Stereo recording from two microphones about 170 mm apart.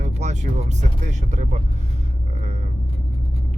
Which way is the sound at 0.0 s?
45° right (ahead or behind).